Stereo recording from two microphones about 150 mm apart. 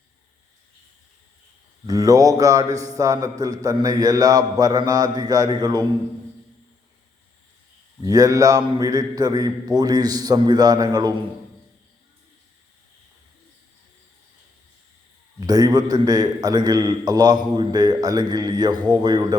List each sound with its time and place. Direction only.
1.9 s a man's voice: 25° right (ahead or behind)
8.0 s a man's voice: 25° right (ahead or behind)
15.4 s a man's voice: 25° right (ahead or behind)